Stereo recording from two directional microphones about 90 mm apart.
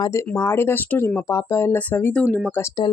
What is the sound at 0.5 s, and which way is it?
Speech, 25° left (ahead or behind).